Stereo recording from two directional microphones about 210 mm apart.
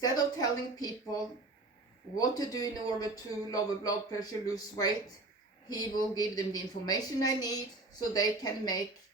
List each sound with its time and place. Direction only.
0.0 s a woman's voice: 20° left (ahead or behind)